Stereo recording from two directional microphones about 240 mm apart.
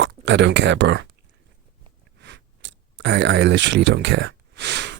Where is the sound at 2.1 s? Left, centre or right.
Right.